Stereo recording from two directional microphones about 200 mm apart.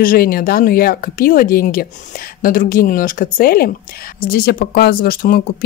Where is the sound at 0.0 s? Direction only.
45° left (ahead or behind).